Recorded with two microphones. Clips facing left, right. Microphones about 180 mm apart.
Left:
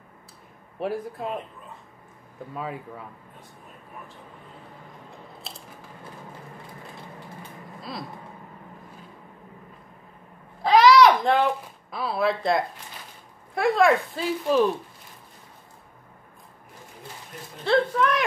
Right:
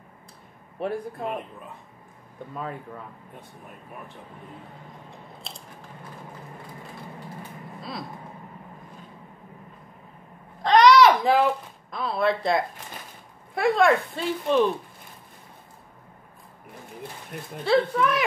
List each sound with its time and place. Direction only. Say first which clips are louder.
0.7 s speech: even; centre (ahead or behind)
2.5 s speech: left 1 dB; 5° left (ahead or behind)
5.5 s biting: left 1 dB; 5° left (ahead or behind)
10.6 s a sound: even; 5° left (ahead or behind)
13.6 s speech: even; centre (ahead or behind)
17.3 s a sound: right 5 dB; 60° right (ahead or behind)
17.6 s speech: even; 5° right (ahead or behind)